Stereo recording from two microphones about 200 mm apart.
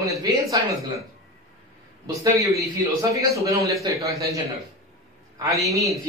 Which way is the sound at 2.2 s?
15° right (ahead or behind).